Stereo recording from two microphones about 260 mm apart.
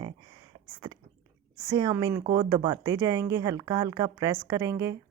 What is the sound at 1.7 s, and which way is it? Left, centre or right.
A woman's voice, centre.